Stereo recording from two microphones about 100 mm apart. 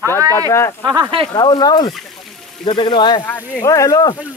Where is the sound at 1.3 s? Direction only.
45° left (ahead or behind).